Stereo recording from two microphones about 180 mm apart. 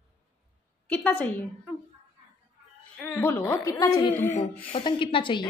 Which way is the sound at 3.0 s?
10° left (ahead or behind).